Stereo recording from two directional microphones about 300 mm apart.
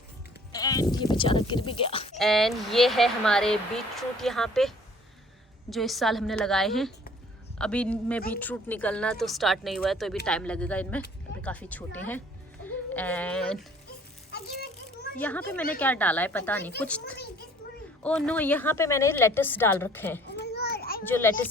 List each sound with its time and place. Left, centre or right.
0.5 s speech: centre
2.1 s speech: centre
5.7 s speech: centre
14.3 s ratchet: left
15.2 s speech: centre
18.0 s a woman's voice: centre
20.2 s children playing: left
21.0 s a woman's voice: centre